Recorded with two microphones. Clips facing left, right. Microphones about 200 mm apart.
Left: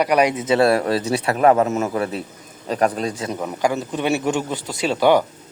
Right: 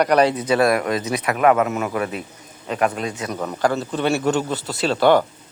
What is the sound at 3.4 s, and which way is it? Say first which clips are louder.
Speech: right 1 dB; 10° left (ahead or behind).